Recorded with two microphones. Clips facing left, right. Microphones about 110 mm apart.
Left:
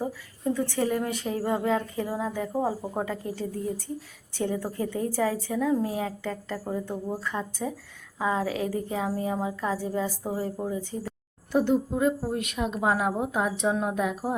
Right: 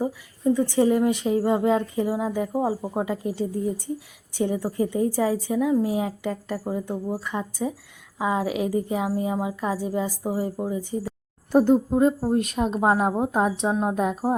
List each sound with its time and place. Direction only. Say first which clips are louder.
0.0 s a woman's voice: right 5 dB; 15° right (ahead or behind)
11.5 s a woman's voice: right 6 dB; 40° right (ahead or behind)